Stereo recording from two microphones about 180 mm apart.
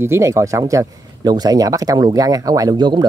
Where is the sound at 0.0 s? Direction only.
15° right (ahead or behind).